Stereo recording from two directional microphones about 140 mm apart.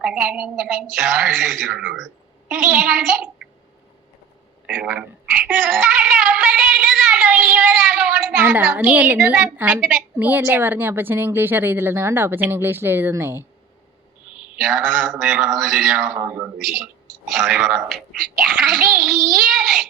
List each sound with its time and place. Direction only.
0.0 s a woman's voice: 10° right (ahead or behind)
4.6 s speech: 10° right (ahead or behind)
14.3 s a child's voice: 5° right (ahead or behind)
16.2 s a woman's voice: 15° right (ahead or behind)
16.6 s a child's voice: 5° right (ahead or behind)
19.3 s child singing: centre (ahead or behind)